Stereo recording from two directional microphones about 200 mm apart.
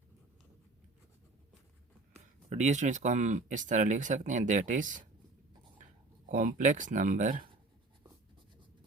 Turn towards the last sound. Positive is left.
turn(degrees=-40)  # may be behind; listen again after turning